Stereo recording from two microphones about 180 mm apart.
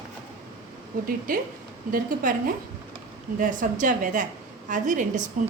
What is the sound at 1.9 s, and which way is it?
Speech, 50° right (ahead or behind).